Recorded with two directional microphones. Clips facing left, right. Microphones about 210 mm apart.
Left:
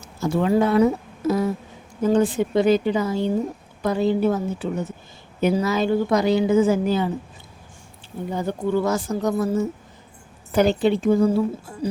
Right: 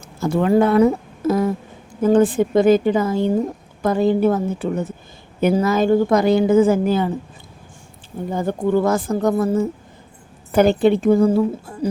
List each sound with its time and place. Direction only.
0.2 s a woman's voice: 55° right (ahead or behind)
8.3 s a woman's voice: 50° right (ahead or behind)
10.5 s a woman's voice: 55° right (ahead or behind)